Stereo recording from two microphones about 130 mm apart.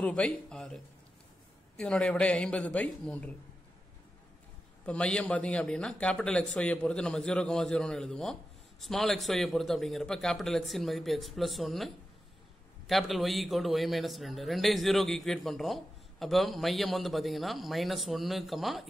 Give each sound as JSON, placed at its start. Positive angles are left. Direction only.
{"t": 0.0, "sound": "speech", "side_deg": 10}
{"t": 1.8, "sound": "a man's voice", "side_deg": 10}
{"t": 4.8, "sound": "a man's voice", "side_deg": 10}